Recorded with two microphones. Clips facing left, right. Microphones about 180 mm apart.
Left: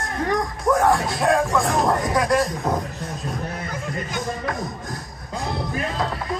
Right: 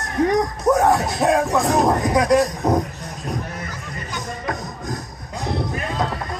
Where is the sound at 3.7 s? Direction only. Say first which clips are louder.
Left 3 dB; 50° left (ahead or behind).